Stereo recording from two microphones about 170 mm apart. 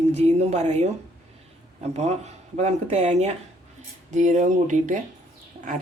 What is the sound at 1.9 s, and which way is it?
Speech, 40° right (ahead or behind).